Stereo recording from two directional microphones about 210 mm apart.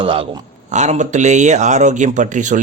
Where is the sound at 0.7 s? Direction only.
35° right (ahead or behind).